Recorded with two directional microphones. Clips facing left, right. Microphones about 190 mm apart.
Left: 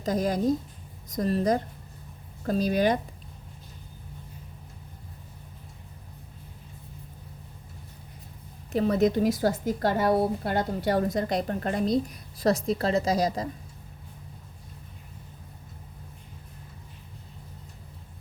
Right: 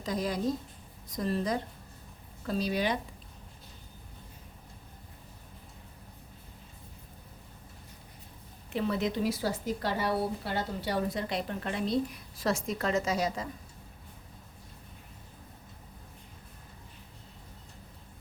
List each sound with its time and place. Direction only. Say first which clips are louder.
0.0 s a woman's voice: left 6 dB; 45° left (ahead or behind)
8.7 s a woman's voice: left 7 dB; 40° left (ahead or behind)